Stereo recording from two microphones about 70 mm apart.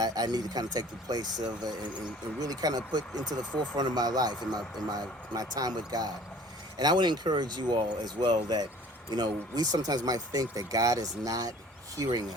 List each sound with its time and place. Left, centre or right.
0.0 s speech: right
3.6 s speech: right
6.7 s speech: right
9.0 s speech: right
11.9 s speech: right